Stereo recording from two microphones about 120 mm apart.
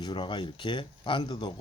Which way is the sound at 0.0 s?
40° left (ahead or behind).